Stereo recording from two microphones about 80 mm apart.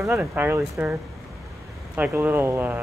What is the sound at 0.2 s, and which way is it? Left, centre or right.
Speech, right.